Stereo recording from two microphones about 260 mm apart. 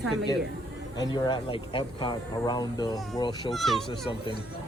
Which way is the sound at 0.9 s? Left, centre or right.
Centre.